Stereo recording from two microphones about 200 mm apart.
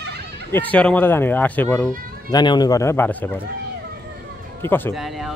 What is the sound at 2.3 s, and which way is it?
Speech, 20° left (ahead or behind).